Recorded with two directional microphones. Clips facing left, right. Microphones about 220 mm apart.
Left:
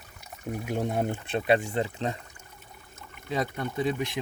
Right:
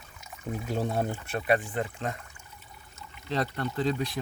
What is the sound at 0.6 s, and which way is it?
Speech, 15° left (ahead or behind).